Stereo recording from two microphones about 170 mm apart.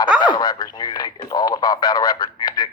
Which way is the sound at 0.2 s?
25° left (ahead or behind).